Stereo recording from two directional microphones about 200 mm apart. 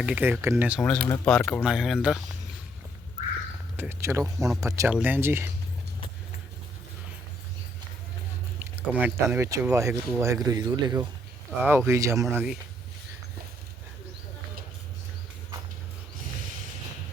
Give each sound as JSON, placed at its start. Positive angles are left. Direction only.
{"t": 0.0, "sound": "speech", "side_deg": -5}
{"t": 0.8, "sound": "speech", "side_deg": 5}
{"t": 3.8, "sound": "speech", "side_deg": -10}
{"t": 8.5, "sound": "speech", "side_deg": -10}